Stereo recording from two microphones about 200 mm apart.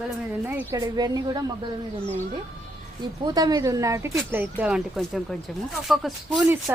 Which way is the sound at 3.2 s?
20° right (ahead or behind).